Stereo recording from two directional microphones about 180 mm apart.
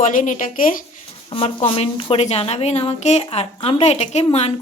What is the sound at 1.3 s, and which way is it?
A woman's voice, 30° left (ahead or behind).